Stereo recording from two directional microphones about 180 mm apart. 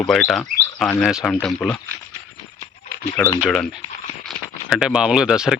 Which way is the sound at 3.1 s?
10° left (ahead or behind).